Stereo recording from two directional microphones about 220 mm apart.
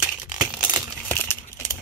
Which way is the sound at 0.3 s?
15° right (ahead or behind).